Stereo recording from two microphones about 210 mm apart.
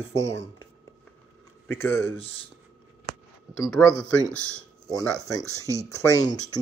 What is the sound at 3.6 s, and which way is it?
Speech, 15° left (ahead or behind).